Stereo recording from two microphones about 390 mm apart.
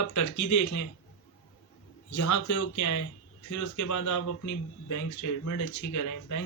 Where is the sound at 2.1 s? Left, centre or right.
Left.